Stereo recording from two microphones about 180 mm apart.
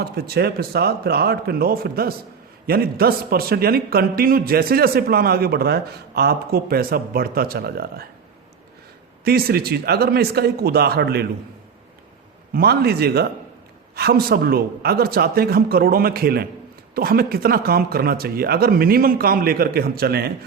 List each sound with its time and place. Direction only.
0.0 s a man's voice: 60° right (ahead or behind)
9.2 s a man's voice: 60° right (ahead or behind)
12.5 s a man's voice: 60° right (ahead or behind)